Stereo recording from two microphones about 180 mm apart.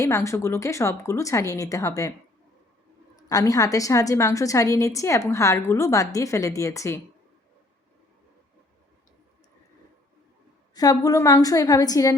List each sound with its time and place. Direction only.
0.0 s a woman's voice: 15° left (ahead or behind)
3.2 s a woman's voice: 20° left (ahead or behind)
10.8 s a woman's voice: 20° left (ahead or behind)